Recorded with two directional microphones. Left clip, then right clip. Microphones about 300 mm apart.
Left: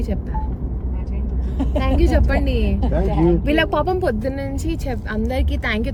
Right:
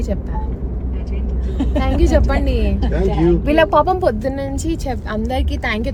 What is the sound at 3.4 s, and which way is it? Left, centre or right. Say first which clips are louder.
Speech: right 5 dB; right.